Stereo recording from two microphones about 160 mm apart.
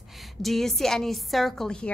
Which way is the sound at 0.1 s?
Centre (ahead or behind).